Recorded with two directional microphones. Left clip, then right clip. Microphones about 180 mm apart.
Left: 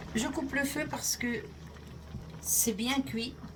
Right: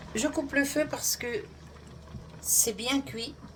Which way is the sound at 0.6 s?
35° right (ahead or behind).